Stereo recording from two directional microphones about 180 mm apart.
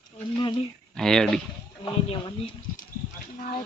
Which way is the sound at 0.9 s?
5° left (ahead or behind).